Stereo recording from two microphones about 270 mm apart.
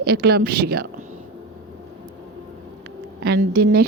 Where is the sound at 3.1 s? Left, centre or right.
Right.